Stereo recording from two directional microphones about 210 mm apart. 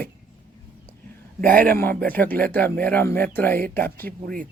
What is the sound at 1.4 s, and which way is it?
Speech, 40° right (ahead or behind).